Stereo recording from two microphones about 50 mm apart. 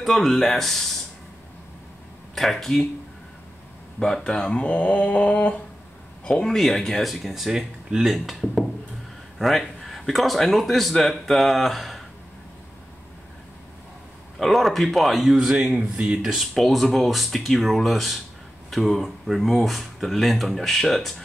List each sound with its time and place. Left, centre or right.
0.0 s speech: centre
2.3 s speech: centre
4.0 s speech: centre
6.3 s speech: centre
14.4 s speech: centre
15.3 s speech: centre
16.5 s speech: centre